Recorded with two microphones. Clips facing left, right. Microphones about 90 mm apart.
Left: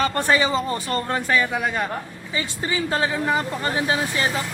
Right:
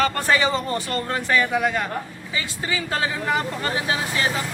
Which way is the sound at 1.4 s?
10° left (ahead or behind).